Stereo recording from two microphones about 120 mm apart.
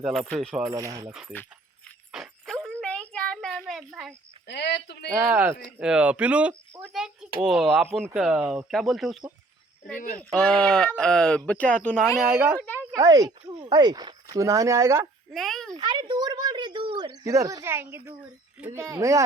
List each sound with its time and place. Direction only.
0.0 s speech: centre (ahead or behind)
0.7 s speech: 30° right (ahead or behind)
2.1 s a sound: 5° right (ahead or behind)
5.3 s speech: 20° right (ahead or behind)
5.6 s speech: 10° right (ahead or behind)
10.2 s speech: 5° left (ahead or behind)
12.0 s speech: 5° right (ahead or behind)
12.5 s speech: 15° left (ahead or behind)
13.0 s speech: 35° right (ahead or behind)
15.3 s speech: centre (ahead or behind)
15.7 s a child's voice: 40° right (ahead or behind)
17.2 s speech: 25° right (ahead or behind)